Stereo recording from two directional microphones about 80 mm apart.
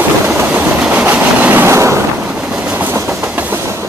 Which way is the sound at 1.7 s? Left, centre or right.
Right.